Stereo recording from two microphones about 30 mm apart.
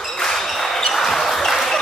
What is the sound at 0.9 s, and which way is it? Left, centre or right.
Basketball bounce, centre.